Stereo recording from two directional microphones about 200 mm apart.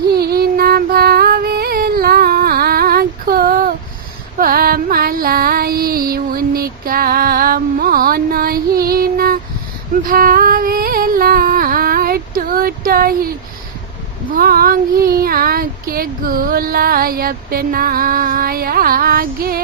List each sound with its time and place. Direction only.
0.1 s music: 50° right (ahead or behind)
10.1 s a sound: 45° right (ahead or behind)
14.3 s child singing: 45° right (ahead or behind)